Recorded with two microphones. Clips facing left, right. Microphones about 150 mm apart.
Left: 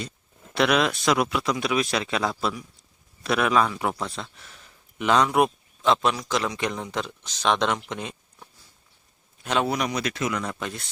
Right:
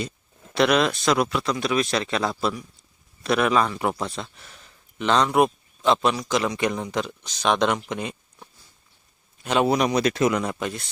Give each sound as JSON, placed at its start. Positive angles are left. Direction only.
{"t": 0.5, "sound": "a man's voice", "side_deg": 0}
{"t": 9.6, "sound": "speech", "side_deg": -25}
{"t": 10.4, "sound": "a man's voice", "side_deg": -5}